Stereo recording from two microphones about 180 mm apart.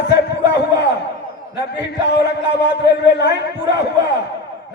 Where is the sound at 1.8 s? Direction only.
70° left (ahead or behind).